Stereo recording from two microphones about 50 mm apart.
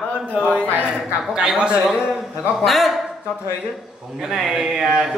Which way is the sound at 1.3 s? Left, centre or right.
Centre.